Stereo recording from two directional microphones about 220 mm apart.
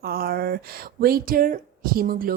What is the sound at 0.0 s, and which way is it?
A woman's voice, 45° right (ahead or behind).